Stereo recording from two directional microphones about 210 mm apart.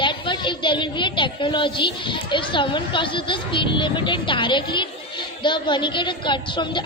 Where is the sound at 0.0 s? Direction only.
20° left (ahead or behind).